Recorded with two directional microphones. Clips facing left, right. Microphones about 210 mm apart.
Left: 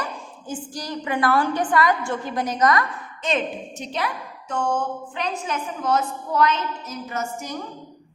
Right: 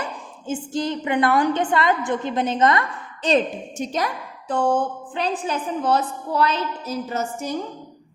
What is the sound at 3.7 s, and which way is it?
A woman's voice, 45° right (ahead or behind).